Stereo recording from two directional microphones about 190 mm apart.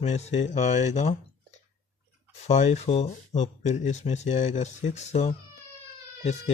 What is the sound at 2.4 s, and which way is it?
Speech, 35° left (ahead or behind).